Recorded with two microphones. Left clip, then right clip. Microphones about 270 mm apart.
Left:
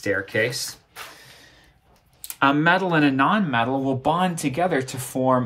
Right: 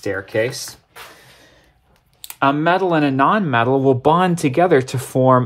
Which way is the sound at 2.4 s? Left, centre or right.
Right.